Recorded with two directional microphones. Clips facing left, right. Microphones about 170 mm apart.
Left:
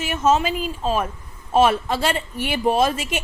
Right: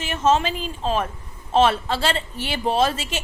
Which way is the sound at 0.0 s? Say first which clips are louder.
Left 1 dB; 10° left (ahead or behind).